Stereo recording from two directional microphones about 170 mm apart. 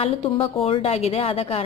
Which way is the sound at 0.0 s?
35° left (ahead or behind).